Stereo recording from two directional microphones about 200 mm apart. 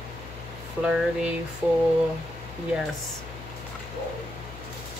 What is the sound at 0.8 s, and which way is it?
Speech, 5° right (ahead or behind).